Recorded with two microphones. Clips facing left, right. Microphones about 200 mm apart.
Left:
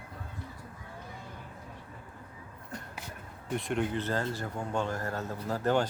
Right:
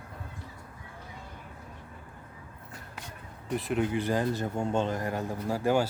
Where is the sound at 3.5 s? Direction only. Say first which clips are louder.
Right 2 dB; centre (ahead or behind).